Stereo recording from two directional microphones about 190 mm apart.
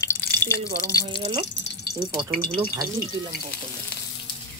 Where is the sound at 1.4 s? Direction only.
65° left (ahead or behind).